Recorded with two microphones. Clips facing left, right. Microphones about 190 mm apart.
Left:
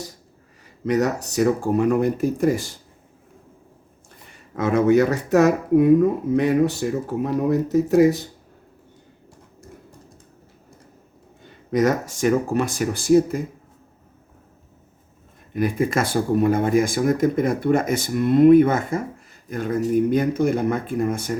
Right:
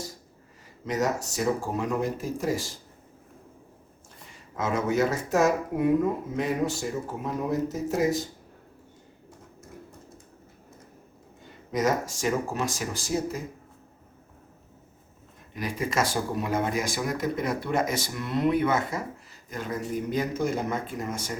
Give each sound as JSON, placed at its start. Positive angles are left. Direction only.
{"t": 0.9, "sound": "speech", "side_deg": 65}
{"t": 4.3, "sound": "speech", "side_deg": 60}
{"t": 11.7, "sound": "speech", "side_deg": 65}
{"t": 15.5, "sound": "speech", "side_deg": 55}